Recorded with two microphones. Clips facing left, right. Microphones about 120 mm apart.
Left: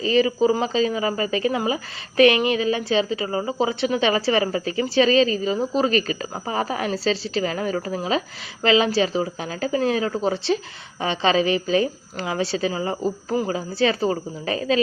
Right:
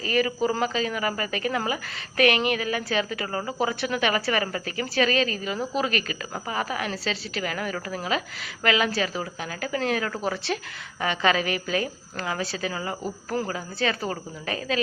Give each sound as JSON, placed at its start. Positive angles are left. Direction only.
{"t": 0.0, "sound": "speech", "side_deg": 25}
{"t": 13.7, "sound": "a woman's voice", "side_deg": 30}